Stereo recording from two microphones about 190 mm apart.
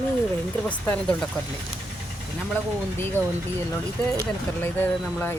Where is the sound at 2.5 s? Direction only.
10° left (ahead or behind).